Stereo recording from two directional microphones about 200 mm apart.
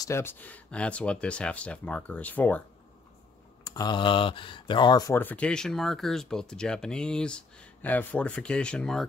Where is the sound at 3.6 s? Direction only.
20° left (ahead or behind).